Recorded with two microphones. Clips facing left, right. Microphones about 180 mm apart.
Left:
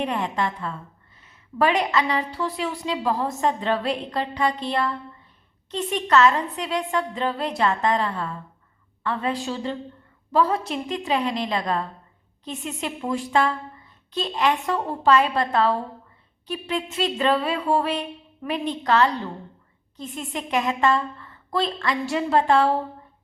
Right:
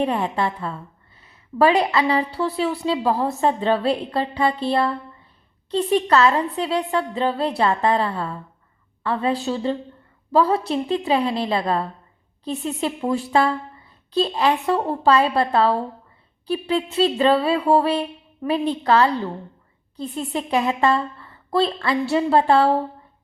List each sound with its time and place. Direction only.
0.0 s a woman's voice: 35° right (ahead or behind)
9.4 s a woman's voice: 35° right (ahead or behind)